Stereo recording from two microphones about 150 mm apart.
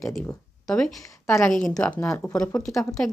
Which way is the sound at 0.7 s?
5° left (ahead or behind).